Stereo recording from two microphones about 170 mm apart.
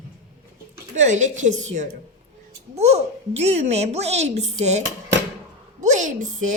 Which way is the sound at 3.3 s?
40° right (ahead or behind).